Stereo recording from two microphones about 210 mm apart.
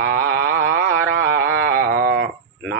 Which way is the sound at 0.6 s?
10° left (ahead or behind).